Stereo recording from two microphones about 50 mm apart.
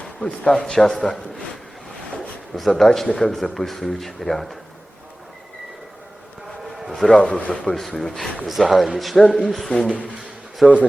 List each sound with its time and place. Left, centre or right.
0.3 s a man's voice: centre
2.6 s speech: centre
6.7 s a sound: centre
7.1 s speech: centre
7.8 s speech: centre